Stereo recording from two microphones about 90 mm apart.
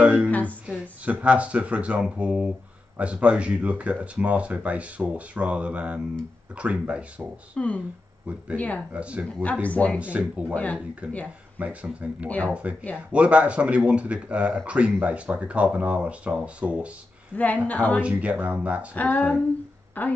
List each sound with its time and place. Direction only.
0.0 s a sound: 15° right (ahead or behind)
0.3 s a sound: 15° left (ahead or behind)
0.7 s speech: 15° right (ahead or behind)
7.5 s speech: 15° left (ahead or behind)
8.9 s speech: 15° right (ahead or behind)
9.4 s speech: 15° left (ahead or behind)
9.9 s speech: 15° right (ahead or behind)
10.5 s speech: 15° left (ahead or behind)
11.0 s speech: 10° right (ahead or behind)
12.3 s speech: 15° left (ahead or behind)
13.1 s speech: 15° right (ahead or behind)
17.6 s speech: 15° left (ahead or behind)
18.0 s speech: 15° right (ahead or behind)
18.9 s a woman's voice: 20° left (ahead or behind)